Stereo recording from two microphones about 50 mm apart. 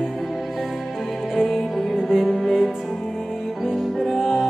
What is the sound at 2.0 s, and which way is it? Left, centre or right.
Music, centre.